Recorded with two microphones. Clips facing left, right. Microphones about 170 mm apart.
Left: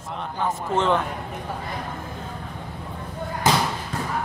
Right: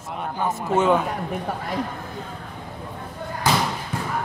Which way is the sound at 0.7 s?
10° right (ahead or behind).